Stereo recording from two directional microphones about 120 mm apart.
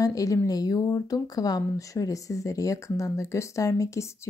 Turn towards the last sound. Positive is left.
turn(degrees=25)  # may be behind; listen again after turning